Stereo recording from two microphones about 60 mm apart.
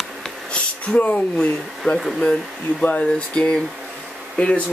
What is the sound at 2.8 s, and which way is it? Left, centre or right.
Speech, left.